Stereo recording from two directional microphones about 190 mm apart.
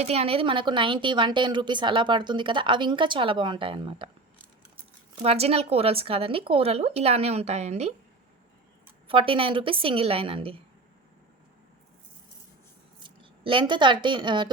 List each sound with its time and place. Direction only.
0.0 s a woman's voice: 30° right (ahead or behind)
5.2 s a woman's voice: 35° right (ahead or behind)
9.0 s a woman's voice: 30° right (ahead or behind)
13.0 s a woman's voice: 25° right (ahead or behind)